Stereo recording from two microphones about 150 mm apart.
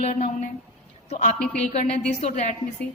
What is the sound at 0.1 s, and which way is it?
Speech, 50° left (ahead or behind).